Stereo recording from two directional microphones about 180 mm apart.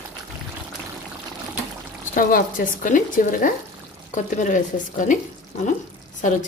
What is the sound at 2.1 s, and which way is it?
Speech, 50° left (ahead or behind).